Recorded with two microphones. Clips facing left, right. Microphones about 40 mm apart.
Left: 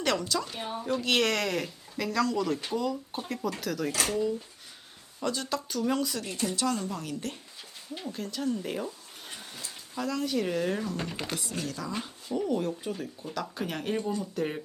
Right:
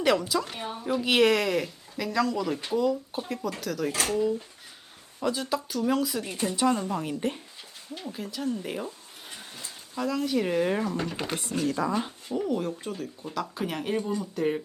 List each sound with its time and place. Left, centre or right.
0.0 s speech: centre
5.2 s speech: centre
6.2 s a woman's voice: right
8.0 s speech: centre
9.9 s speech: centre
10.5 s a woman's voice: right
10.9 s speech: centre
11.6 s speech: right
12.5 s speech: centre